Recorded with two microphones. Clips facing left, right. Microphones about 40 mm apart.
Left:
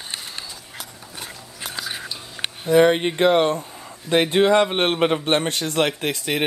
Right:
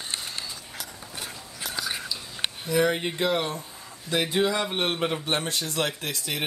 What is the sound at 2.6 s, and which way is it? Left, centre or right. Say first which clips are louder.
A man's voice: left 9 dB; left.